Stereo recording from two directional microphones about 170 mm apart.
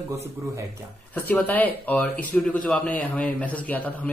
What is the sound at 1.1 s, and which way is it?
Speech, 10° left (ahead or behind).